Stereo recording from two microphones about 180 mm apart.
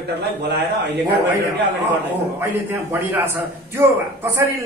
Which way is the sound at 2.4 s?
15° right (ahead or behind).